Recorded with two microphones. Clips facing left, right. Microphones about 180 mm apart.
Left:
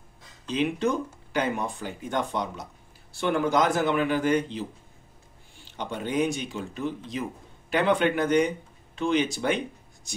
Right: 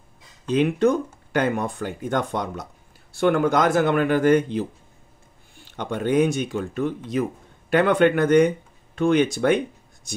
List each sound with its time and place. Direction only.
0.5 s speech: 50° right (ahead or behind)
5.7 s speech: 55° right (ahead or behind)